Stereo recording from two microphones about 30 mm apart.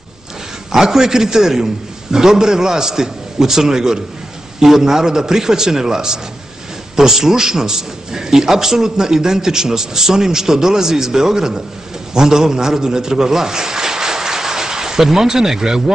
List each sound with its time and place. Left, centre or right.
0.7 s a man's voice: centre